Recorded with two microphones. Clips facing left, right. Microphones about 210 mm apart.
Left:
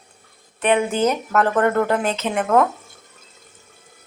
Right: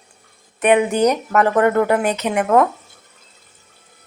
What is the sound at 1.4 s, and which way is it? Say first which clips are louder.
Speech: right 3 dB; 10° right (ahead or behind).